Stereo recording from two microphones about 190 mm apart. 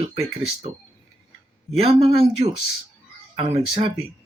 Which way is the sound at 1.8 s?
30° right (ahead or behind).